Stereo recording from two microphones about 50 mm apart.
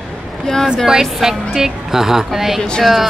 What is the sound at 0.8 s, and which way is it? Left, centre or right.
A woman's voice, centre.